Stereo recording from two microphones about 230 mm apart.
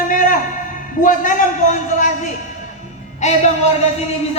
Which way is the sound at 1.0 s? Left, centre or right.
Left.